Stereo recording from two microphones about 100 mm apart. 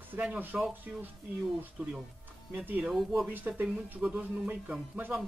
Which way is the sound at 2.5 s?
15° right (ahead or behind).